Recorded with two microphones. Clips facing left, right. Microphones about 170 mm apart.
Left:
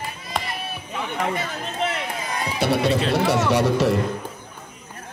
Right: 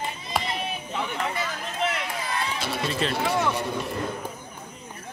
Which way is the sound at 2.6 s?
65° left (ahead or behind).